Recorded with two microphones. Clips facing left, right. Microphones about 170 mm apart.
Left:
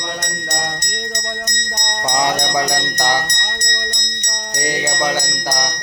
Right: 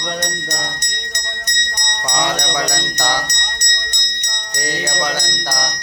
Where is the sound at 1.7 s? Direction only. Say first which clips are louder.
Left 5 dB; 45° left (ahead or behind).